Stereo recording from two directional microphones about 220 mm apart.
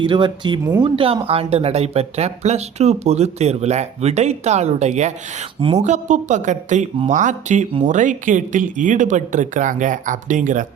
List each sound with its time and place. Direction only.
0.0 s speech: 20° right (ahead or behind)